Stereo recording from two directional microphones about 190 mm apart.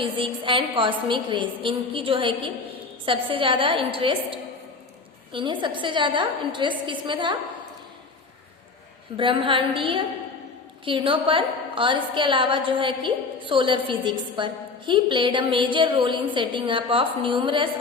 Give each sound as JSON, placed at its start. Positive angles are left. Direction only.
{"t": 0.0, "sound": "a woman's voice", "side_deg": -25}
{"t": 9.1, "sound": "a woman's voice", "side_deg": -30}